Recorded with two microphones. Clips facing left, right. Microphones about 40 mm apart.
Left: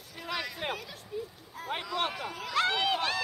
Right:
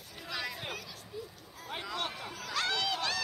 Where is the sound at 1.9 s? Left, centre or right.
Left.